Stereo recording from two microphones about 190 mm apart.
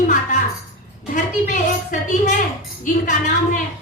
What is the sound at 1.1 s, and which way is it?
A woman's voice, 40° left (ahead or behind).